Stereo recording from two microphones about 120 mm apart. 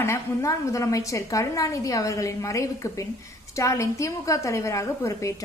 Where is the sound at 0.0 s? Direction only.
20° left (ahead or behind).